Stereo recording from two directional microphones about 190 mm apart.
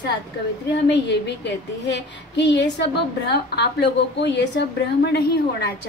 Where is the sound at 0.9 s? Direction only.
65° left (ahead or behind).